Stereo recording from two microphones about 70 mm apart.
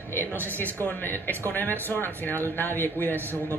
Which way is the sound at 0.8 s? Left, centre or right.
Left.